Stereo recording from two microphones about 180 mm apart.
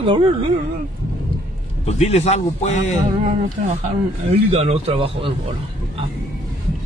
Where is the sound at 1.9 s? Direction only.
35° left (ahead or behind).